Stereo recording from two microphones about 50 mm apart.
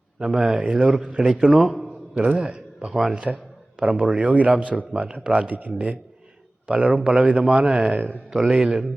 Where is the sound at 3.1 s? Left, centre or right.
Right.